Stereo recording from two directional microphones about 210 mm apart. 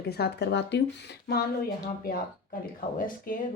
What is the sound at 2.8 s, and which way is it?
Speech, 40° left (ahead or behind).